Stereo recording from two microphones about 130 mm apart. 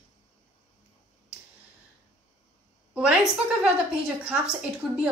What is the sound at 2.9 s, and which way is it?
A woman's voice, 5° right (ahead or behind).